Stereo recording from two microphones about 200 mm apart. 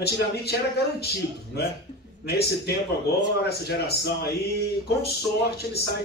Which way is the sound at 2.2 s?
55° left (ahead or behind).